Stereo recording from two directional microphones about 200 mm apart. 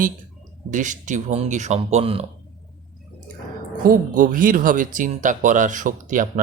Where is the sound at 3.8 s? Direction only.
45° right (ahead or behind).